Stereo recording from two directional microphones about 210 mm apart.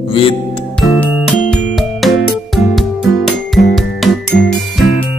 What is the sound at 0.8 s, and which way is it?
Music, centre (ahead or behind).